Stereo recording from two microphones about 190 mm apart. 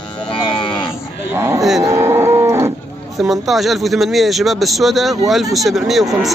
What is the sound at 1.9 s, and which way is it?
Livestock, 15° right (ahead or behind).